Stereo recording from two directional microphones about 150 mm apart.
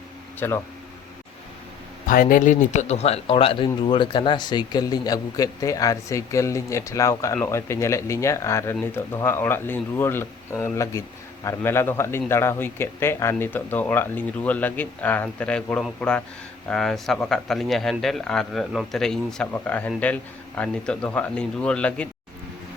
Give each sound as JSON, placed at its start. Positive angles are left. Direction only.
{"t": 0.3, "sound": "speech", "side_deg": 15}
{"t": 2.0, "sound": "a man's voice", "side_deg": 65}